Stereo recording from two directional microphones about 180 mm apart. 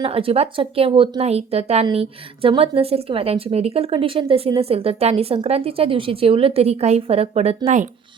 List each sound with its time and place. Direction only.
0.0 s speech: 30° right (ahead or behind)